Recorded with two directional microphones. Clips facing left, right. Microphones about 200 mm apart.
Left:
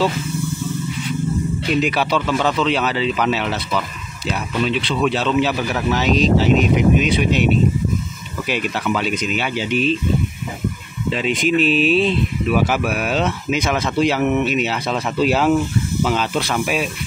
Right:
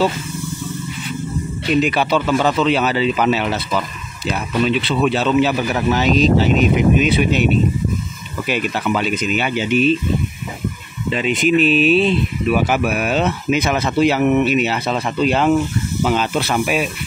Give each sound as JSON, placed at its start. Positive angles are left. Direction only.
{"t": 1.7, "sound": "speech", "side_deg": 0}
{"t": 11.1, "sound": "speech", "side_deg": 0}